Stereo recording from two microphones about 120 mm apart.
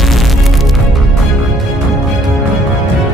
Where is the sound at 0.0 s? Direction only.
Centre (ahead or behind).